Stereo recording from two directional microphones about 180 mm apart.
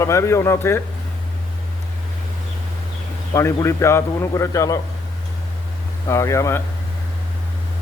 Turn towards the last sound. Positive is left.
turn(degrees=15)  # may be behind; listen again after turning